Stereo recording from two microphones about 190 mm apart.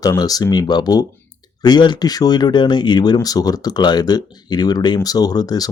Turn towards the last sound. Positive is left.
turn(degrees=20)  # may be behind; listen again after turning